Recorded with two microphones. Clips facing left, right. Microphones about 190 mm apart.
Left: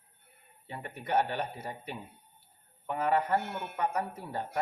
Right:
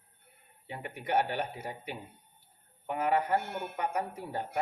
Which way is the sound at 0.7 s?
15° right (ahead or behind).